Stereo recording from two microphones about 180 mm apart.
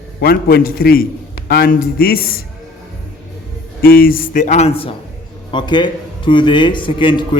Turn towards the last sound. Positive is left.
turn(degrees=30)  # may be behind; listen again after turning